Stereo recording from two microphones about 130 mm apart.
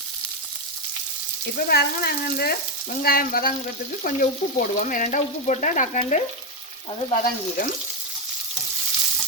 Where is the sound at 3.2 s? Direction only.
90° left; by 6.2 s 75° left (ahead or behind).